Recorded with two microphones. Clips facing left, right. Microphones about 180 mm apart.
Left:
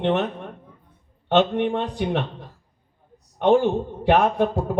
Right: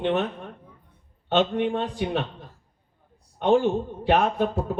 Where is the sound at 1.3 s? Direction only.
65° left (ahead or behind).